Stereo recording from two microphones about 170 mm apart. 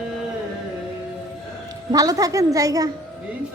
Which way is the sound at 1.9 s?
20° right (ahead or behind).